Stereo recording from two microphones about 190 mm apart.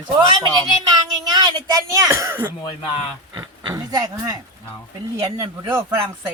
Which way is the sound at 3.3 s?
20° right (ahead or behind).